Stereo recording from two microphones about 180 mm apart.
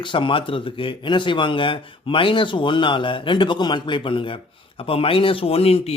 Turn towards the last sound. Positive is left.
turn(degrees=35)  # may be behind; listen again after turning